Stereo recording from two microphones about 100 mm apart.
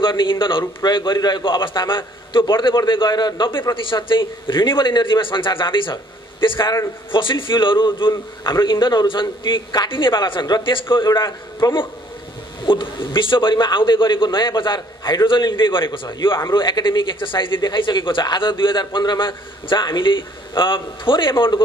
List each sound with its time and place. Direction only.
0.0 s a man's voice: 55° left (ahead or behind)
11.1 s a man's voice: 40° left (ahead or behind)
12.6 s speech: 55° left (ahead or behind)